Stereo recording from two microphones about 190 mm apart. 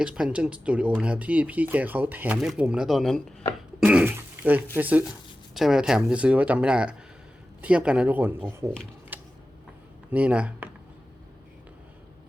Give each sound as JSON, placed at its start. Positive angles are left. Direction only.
{"t": 0.0, "sound": "speech", "side_deg": -5}
{"t": 9.1, "sound": "a sound", "side_deg": -10}
{"t": 10.1, "sound": "speech", "side_deg": -5}